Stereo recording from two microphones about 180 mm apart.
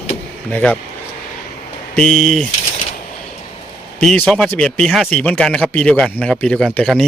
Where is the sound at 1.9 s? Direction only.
5° left (ahead or behind).